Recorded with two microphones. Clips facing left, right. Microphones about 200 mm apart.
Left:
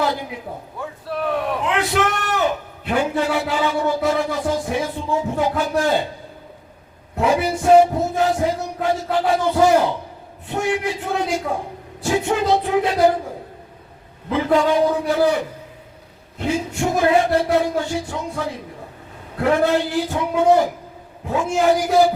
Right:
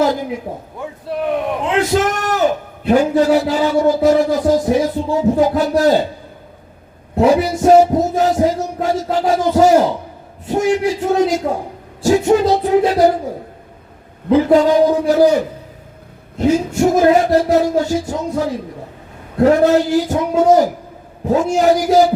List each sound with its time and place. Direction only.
0.8 s a man's voice: 20° right (ahead or behind)
1.9 s a man's voice: 40° right (ahead or behind)
7.2 s music: 40° right (ahead or behind)
10.4 s a man's voice: 40° right (ahead or behind)
14.3 s a man's voice: 40° right (ahead or behind)